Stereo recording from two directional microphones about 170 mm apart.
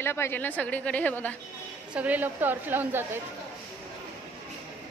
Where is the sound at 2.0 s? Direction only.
10° right (ahead or behind).